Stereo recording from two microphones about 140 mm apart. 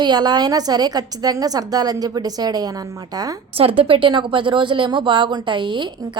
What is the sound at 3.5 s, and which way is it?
A woman's voice, 40° right (ahead or behind).